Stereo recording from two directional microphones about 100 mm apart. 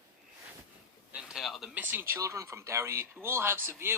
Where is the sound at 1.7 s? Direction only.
20° right (ahead or behind).